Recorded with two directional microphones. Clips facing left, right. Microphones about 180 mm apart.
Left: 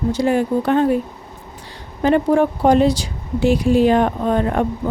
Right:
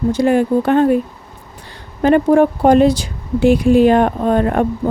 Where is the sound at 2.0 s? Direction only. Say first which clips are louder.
Right 4 dB; 55° right (ahead or behind).